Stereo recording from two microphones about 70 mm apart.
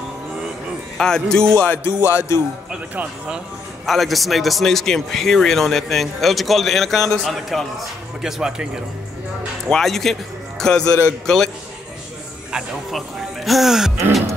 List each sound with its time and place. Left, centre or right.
0.9 s speech: centre
2.0 s music: right
2.7 s speech: centre
3.8 s a man's voice: centre
9.7 s a man's voice: centre
12.5 s speech: centre